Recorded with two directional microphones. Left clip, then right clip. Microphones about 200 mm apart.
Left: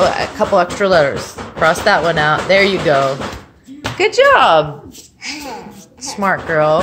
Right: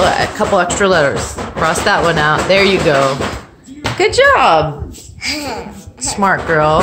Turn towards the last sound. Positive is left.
turn(degrees=10)  # may be behind; listen again after turning